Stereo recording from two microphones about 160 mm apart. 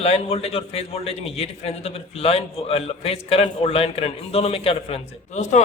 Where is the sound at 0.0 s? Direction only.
40° left (ahead or behind).